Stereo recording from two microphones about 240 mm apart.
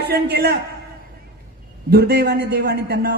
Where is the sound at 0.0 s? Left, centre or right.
Right.